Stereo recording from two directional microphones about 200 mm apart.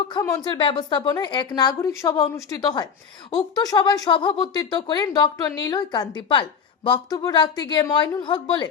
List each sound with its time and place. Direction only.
0.4 s speech: 25° left (ahead or behind)